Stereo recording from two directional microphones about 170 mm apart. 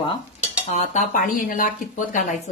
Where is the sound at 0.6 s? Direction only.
45° left (ahead or behind).